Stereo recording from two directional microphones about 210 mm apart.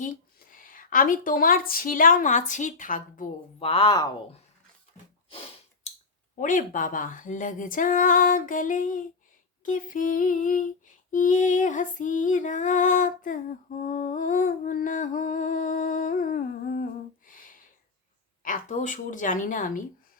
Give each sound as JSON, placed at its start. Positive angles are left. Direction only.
{"t": 0.0, "sound": "a woman's voice", "side_deg": 40}
{"t": 2.5, "sound": "lullaby", "side_deg": 35}
{"t": 3.6, "sound": "speech", "side_deg": 25}
{"t": 5.3, "sound": "a sound", "side_deg": 25}
{"t": 6.4, "sound": "lullaby", "side_deg": 40}
{"t": 17.2, "sound": "a sound", "side_deg": 40}
{"t": 18.4, "sound": "lullaby", "side_deg": 35}